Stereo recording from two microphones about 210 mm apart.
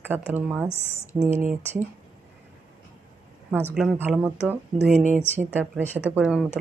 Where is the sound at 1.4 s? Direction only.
40° right (ahead or behind).